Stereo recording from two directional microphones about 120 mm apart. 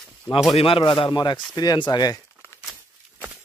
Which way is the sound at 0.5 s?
50° left (ahead or behind).